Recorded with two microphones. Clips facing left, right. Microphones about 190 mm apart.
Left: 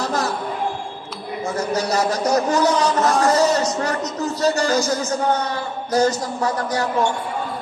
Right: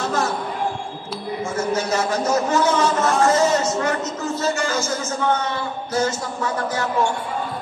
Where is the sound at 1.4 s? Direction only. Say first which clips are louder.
Left 1 dB; 35° left (ahead or behind).